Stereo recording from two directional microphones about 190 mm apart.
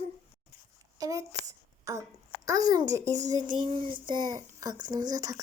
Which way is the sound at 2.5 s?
20° right (ahead or behind).